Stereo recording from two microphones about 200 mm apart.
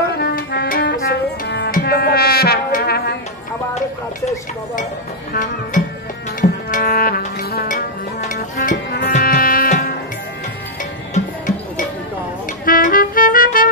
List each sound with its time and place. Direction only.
0.2 s music: 55° left (ahead or behind)
5.3 s music: 40° left (ahead or behind)
11.1 s music: 40° left (ahead or behind)